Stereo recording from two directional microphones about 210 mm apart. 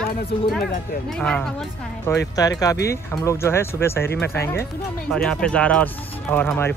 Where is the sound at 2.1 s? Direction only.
15° left (ahead or behind).